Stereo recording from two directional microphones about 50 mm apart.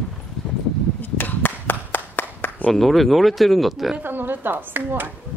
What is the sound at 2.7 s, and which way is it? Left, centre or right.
Speech, centre.